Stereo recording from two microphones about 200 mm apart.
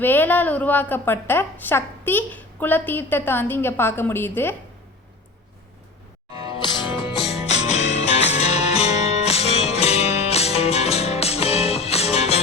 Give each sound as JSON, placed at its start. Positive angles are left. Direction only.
{"t": 0.0, "sound": "a woman's voice", "side_deg": 10}
{"t": 6.5, "sound": "music", "side_deg": 25}